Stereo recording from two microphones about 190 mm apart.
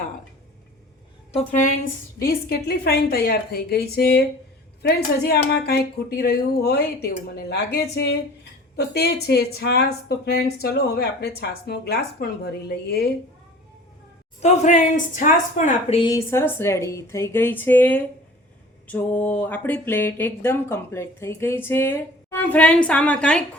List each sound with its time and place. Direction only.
1.5 s a woman's voice: 40° left (ahead or behind)
2.2 s speech: 55° left (ahead or behind)
14.4 s a woman's voice: 35° left (ahead or behind)
16.0 s speech: 15° left (ahead or behind)